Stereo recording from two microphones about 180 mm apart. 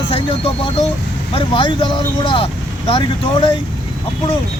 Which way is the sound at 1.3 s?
30° left (ahead or behind).